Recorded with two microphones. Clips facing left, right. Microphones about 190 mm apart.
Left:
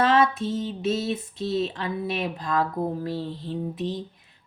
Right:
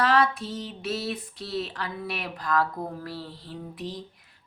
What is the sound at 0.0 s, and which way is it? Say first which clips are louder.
A woman's voice: left 3 dB; 25° left (ahead or behind).